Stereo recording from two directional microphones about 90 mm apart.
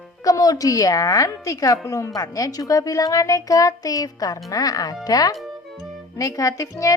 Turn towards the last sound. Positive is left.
turn(degrees=35)  # may be behind; listen again after turning